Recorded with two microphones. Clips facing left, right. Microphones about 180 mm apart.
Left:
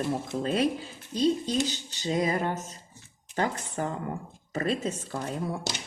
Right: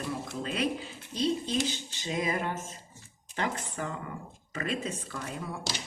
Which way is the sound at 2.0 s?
35° left (ahead or behind).